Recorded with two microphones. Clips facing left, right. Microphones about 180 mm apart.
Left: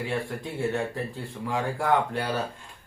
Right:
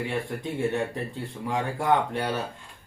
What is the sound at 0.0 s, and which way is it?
Speech, 20° right (ahead or behind).